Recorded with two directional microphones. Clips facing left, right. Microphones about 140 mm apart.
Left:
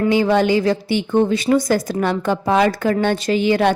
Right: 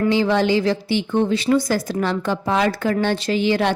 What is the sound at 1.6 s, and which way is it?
A woman's voice, 50° left (ahead or behind).